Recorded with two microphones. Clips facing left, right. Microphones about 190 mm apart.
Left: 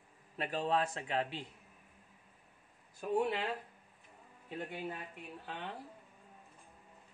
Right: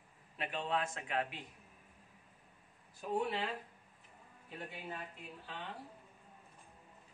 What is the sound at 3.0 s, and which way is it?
Speech, 50° left (ahead or behind).